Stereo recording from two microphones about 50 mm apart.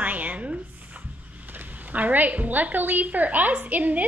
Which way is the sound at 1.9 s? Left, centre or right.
Right.